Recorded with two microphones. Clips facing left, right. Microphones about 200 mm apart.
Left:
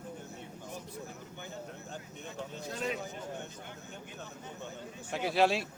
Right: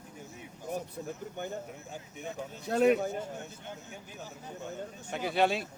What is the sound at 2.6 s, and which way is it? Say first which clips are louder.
Speech: right 13 dB; 65° right (ahead or behind).